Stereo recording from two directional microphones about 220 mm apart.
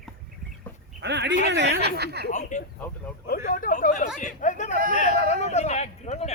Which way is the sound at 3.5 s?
40° left (ahead or behind).